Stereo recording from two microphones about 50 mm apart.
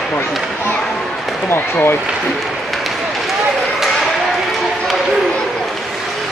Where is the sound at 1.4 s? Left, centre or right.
Left.